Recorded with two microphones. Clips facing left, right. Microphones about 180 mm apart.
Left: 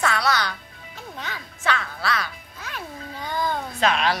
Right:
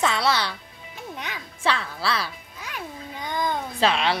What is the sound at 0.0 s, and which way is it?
Music, 25° right (ahead or behind).